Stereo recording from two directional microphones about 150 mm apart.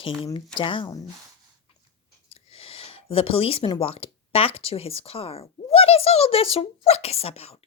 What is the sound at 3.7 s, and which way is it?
Speech, 40° left (ahead or behind).